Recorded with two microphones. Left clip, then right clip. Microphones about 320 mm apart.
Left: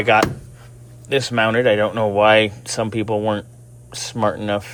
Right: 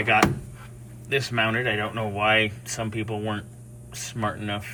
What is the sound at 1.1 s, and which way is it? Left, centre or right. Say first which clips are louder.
Speech: left 7 dB; centre.